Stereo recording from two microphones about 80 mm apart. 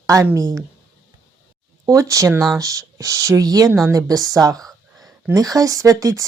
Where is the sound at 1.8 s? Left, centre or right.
Right.